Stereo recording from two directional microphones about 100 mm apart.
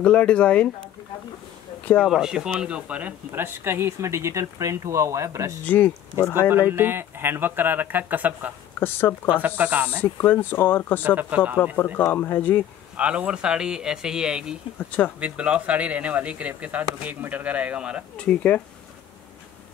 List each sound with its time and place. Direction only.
0.0 s speech: 10° left (ahead or behind)
2.0 s speech: 5° right (ahead or behind); by 5.6 s 30° right (ahead or behind)
5.7 s speech: 20° left (ahead or behind)
6.7 s speech: 25° right (ahead or behind)
8.7 s speech: 20° left (ahead or behind)
9.6 s speech: 15° right (ahead or behind)
10.0 s speech: 20° left (ahead or behind)
11.1 s speech: 15° right (ahead or behind)
12.0 s speech: 25° left (ahead or behind)
12.9 s speech: 10° right (ahead or behind)
14.8 s speech: 15° left (ahead or behind)
15.1 s speech: 10° right (ahead or behind)
18.1 s speech: 10° left (ahead or behind)